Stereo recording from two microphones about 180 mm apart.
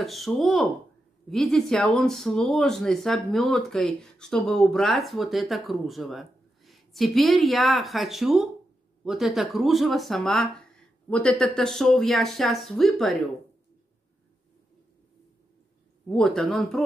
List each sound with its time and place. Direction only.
0.0 s speech: centre (ahead or behind)
16.1 s speech: centre (ahead or behind)